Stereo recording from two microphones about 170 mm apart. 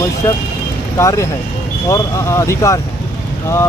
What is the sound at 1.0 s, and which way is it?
Speech, 20° left (ahead or behind).